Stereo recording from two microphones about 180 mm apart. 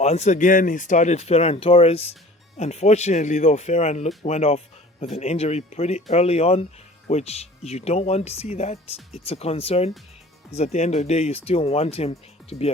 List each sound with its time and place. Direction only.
0.0 s speech: 40° left (ahead or behind)